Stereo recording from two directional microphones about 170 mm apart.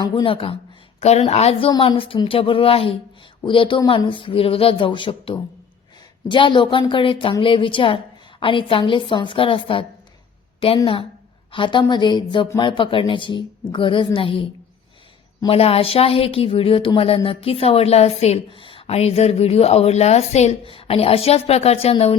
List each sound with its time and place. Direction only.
0.0 s a woman's voice: 30° left (ahead or behind)
11.5 s a woman's voice: 30° left (ahead or behind)